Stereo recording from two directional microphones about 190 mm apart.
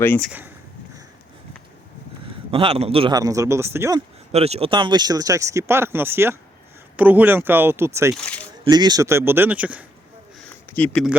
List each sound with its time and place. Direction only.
0.0 s speech: 10° left (ahead or behind)
0.3 s speech: 10° right (ahead or behind)
2.5 s a man's voice: 30° right (ahead or behind)
4.3 s speech: 35° right (ahead or behind); by 8.1 s 15° right (ahead or behind)
8.1 s speech: 5° left (ahead or behind)
8.7 s speech: 20° right (ahead or behind)
10.5 s a sound: 10° left (ahead or behind)